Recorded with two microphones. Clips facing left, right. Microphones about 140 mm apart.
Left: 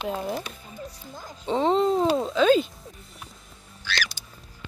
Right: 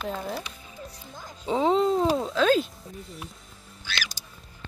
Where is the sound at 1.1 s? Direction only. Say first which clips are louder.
Left 1 dB; centre (ahead or behind).